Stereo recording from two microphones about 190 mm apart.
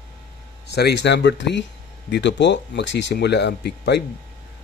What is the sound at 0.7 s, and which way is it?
Speech, 60° left (ahead or behind).